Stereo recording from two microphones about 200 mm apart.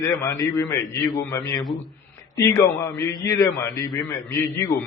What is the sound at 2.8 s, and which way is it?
A man's voice, 15° left (ahead or behind).